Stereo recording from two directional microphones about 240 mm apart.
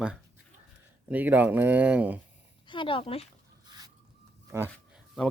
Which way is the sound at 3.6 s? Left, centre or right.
Centre.